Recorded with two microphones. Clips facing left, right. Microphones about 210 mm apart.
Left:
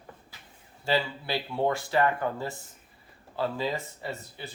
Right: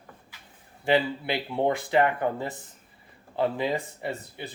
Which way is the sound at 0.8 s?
20° right (ahead or behind).